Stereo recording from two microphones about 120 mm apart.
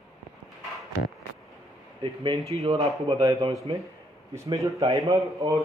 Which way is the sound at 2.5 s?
60° right (ahead or behind).